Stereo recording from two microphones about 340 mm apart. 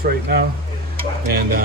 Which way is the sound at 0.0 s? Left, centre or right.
Right.